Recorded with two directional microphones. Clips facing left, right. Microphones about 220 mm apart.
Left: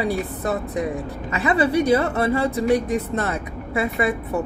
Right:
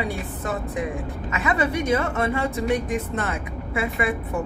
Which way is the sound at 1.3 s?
35° left (ahead or behind).